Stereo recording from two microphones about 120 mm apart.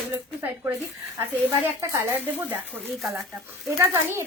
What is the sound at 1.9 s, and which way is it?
Speech, 20° right (ahead or behind).